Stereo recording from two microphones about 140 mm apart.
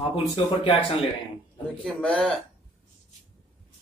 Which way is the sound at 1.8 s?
5° left (ahead or behind).